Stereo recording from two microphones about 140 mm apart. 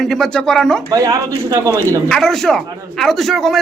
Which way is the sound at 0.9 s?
25° right (ahead or behind).